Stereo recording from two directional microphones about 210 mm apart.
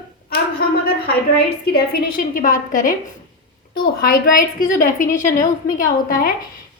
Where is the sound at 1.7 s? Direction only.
45° left (ahead or behind).